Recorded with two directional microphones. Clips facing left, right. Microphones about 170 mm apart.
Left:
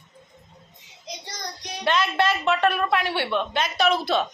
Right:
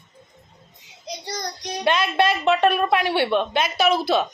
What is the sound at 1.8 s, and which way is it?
A woman's voice, 15° right (ahead or behind).